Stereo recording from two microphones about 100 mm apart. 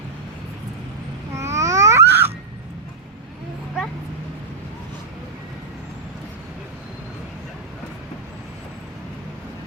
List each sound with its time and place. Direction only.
1.4 s babbling: 30° right (ahead or behind)